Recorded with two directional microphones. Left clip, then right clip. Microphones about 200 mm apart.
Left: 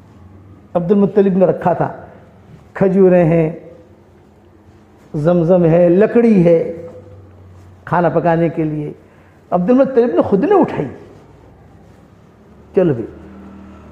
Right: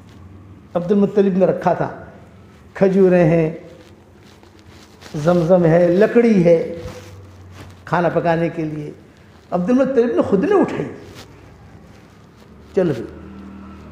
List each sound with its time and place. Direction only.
0.7 s a man's voice: 30° left (ahead or behind)
5.1 s a man's voice: 40° left (ahead or behind)
7.8 s a man's voice: 40° left (ahead or behind)